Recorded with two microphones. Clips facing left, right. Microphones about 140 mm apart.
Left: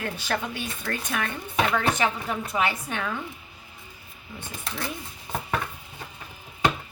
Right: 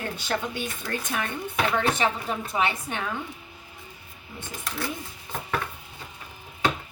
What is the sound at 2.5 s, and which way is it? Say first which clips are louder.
Speech: even; 25° right (ahead or behind).